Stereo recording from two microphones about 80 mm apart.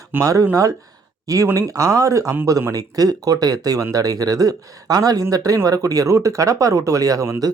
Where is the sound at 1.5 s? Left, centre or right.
Right.